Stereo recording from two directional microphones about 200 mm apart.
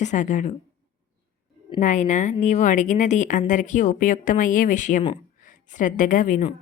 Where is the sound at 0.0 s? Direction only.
40° left (ahead or behind).